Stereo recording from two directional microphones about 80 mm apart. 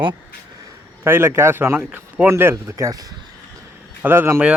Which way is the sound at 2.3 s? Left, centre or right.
Right.